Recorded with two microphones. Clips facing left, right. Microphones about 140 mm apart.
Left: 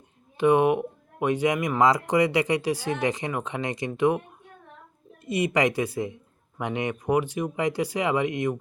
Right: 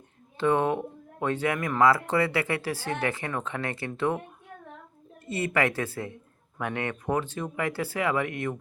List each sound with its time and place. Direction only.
0.3 s speech: 15° left (ahead or behind)
5.2 s speech: 15° left (ahead or behind)